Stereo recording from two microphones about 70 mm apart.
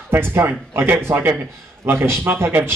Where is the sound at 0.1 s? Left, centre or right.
Right.